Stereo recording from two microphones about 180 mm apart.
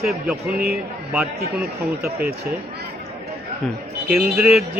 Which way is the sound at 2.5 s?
65° right (ahead or behind).